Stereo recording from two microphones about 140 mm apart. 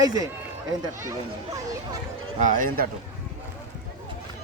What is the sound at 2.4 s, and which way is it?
Speech, 75° right (ahead or behind).